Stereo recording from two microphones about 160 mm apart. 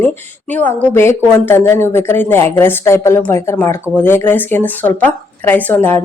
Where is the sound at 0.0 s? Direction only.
10° left (ahead or behind).